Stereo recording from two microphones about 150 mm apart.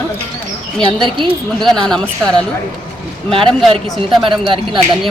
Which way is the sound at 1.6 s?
5° left (ahead or behind).